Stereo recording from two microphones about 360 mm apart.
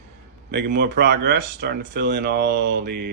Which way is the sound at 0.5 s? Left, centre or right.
Right.